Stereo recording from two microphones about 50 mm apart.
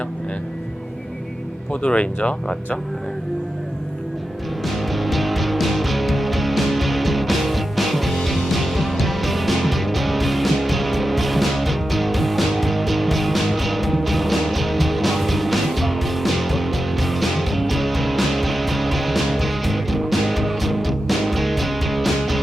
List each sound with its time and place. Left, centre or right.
1.7 s speech: left
4.6 s music: centre